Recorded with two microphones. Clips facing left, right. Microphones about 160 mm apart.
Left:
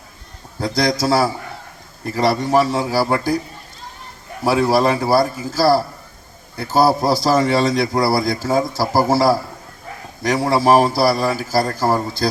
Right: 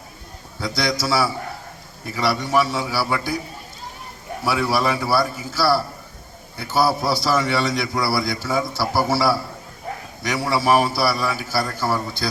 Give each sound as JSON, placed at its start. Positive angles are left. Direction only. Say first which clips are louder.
{"t": 0.6, "sound": "a man's voice", "louder": "left 5 dB", "side_deg": 40}
{"t": 4.4, "sound": "a man's voice", "louder": "left 6 dB", "side_deg": 40}